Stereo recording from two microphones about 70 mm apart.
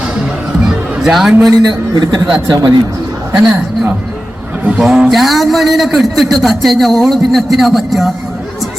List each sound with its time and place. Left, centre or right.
1.0 s a man's voice: centre
2.0 s a man's voice: right
4.8 s a man's voice: centre